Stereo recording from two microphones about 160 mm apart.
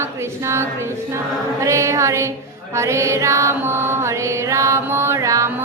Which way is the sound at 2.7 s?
20° right (ahead or behind).